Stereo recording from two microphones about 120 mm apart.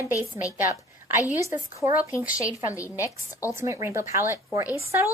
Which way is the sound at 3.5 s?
25° right (ahead or behind).